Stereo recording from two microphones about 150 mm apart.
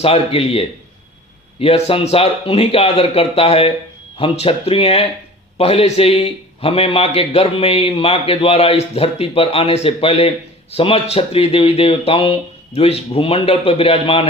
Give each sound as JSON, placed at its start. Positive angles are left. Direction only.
{"t": 0.0, "sound": "a man's voice", "side_deg": 40}
{"t": 1.6, "sound": "a man's voice", "side_deg": 40}